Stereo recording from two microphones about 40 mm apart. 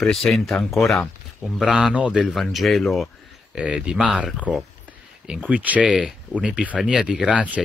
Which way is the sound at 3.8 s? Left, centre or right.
Centre.